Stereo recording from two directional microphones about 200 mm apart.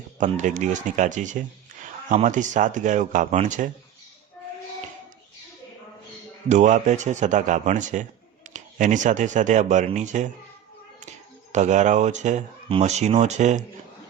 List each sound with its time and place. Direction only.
0.2 s speech: 40° right (ahead or behind)
6.5 s speech: 35° right (ahead or behind)
11.5 s speech: 35° right (ahead or behind)